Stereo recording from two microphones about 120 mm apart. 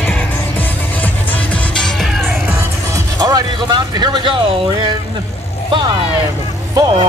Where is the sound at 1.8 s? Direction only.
Centre (ahead or behind).